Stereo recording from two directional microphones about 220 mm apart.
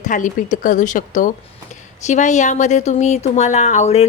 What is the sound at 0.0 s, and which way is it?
A woman's voice, 35° left (ahead or behind).